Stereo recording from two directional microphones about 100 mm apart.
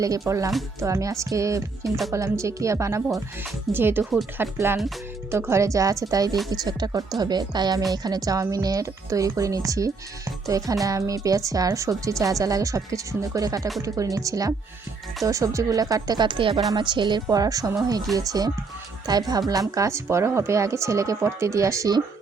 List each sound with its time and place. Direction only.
0.0 s a woman's voice: 35° right (ahead or behind); by 17.2 s 50° right (ahead or behind)
17.2 s a woman's voice: 35° right (ahead or behind)